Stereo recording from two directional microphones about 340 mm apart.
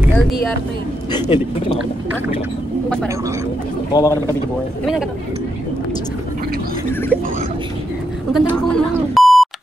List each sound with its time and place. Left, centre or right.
1.1 s a man's voice: centre
3.9 s a man's voice: centre
6.9 s a sound: centre
8.3 s beep: centre